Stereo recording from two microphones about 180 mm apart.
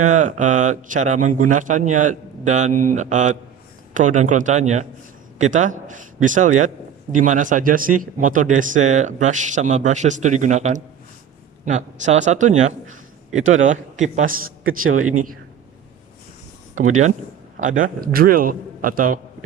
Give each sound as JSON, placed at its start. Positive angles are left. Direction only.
{"t": 0.1, "sound": "a man's voice", "side_deg": -45}
{"t": 13.3, "sound": "speech", "side_deg": -90}
{"t": 13.7, "sound": "a man's voice", "side_deg": -45}
{"t": 16.7, "sound": "a man's voice", "side_deg": -45}